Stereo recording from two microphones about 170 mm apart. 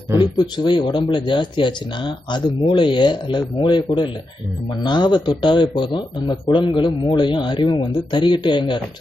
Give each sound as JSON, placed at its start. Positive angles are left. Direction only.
{"t": 0.2, "sound": "speech", "side_deg": 25}